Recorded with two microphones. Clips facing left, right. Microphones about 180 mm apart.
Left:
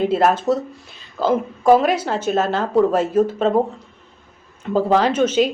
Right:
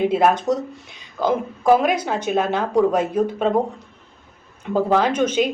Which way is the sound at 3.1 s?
5° left (ahead or behind).